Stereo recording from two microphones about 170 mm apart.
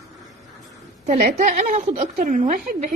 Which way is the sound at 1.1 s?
60° right (ahead or behind).